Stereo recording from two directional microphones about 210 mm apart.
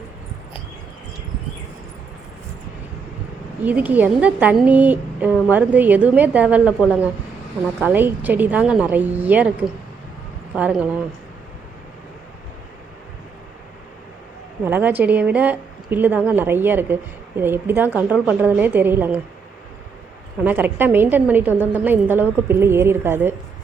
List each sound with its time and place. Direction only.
3.6 s a woman's voice: 10° right (ahead or behind)
14.6 s a woman's voice: 10° right (ahead or behind)
20.4 s a woman's voice: 10° right (ahead or behind)